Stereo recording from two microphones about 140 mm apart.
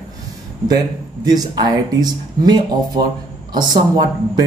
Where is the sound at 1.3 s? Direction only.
30° right (ahead or behind).